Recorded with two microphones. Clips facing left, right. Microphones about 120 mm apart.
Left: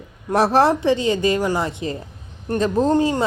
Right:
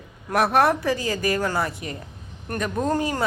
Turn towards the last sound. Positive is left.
turn(degrees=25)  # may be behind; listen again after turning